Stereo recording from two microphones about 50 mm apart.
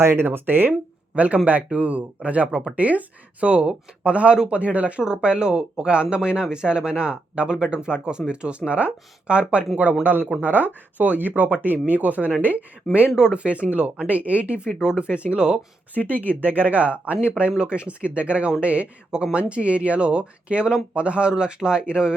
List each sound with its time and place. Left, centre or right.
0.0 s speech: right
0.7 s speech: right
10.0 s speech: right
14.7 s speech: centre
16.0 s speech: centre
16.4 s speech: right; by 22.1 s centre